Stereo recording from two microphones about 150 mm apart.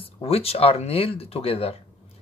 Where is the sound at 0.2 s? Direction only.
40° left (ahead or behind).